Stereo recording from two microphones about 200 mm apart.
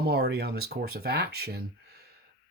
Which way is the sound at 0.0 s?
55° right (ahead or behind).